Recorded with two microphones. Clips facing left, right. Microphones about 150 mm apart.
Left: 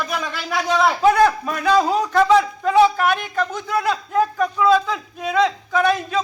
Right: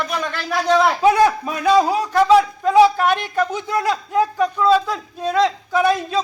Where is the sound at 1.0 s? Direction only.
10° right (ahead or behind).